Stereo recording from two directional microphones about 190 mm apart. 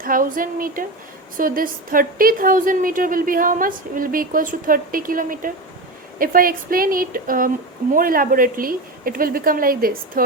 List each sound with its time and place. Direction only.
0.0 s a woman's voice: 45° right (ahead or behind)